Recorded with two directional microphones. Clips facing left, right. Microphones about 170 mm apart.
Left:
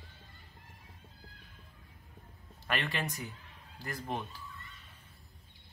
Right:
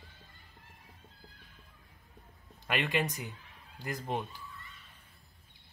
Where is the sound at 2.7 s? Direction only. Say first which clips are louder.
Right 4 dB; 15° right (ahead or behind).